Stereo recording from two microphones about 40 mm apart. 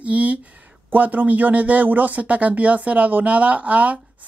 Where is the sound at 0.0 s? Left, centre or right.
Right.